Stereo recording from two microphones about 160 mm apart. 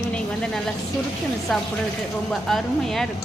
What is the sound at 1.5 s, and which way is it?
Speech, centre (ahead or behind).